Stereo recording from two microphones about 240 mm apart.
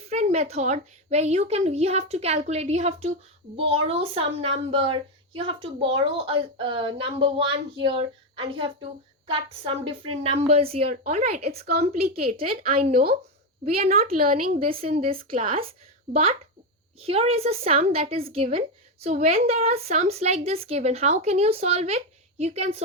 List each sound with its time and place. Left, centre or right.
0.1 s a woman's voice: right
12.3 s speech: right
13.9 s a woman's voice: right
17.0 s speech: right